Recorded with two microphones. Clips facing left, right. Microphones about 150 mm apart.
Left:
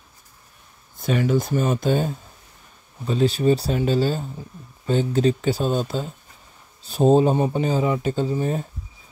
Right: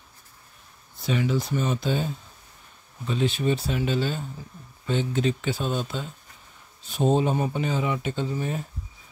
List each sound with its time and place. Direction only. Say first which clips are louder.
0.9 s speech: left 4 dB; 50° left (ahead or behind)